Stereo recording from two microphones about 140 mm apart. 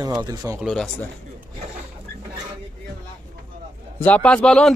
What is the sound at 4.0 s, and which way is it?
Speech, 10° left (ahead or behind).